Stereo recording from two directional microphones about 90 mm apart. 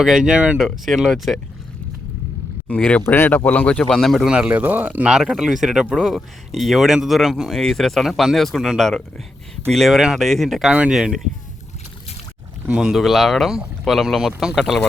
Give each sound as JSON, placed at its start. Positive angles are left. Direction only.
{"t": 0.0, "sound": "speech", "side_deg": -5}
{"t": 2.6, "sound": "speech", "side_deg": 10}
{"t": 4.3, "sound": "speech", "side_deg": -15}
{"t": 5.1, "sound": "speech", "side_deg": -5}
{"t": 12.7, "sound": "speech", "side_deg": -5}